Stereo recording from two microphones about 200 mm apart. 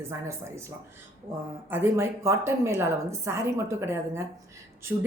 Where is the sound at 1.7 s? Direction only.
10° right (ahead or behind).